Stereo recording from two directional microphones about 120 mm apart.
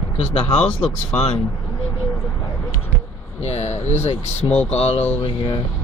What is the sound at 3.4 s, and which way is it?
Speech, 65° left (ahead or behind).